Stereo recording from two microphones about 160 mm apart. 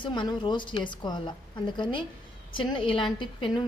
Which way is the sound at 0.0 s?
30° left (ahead or behind).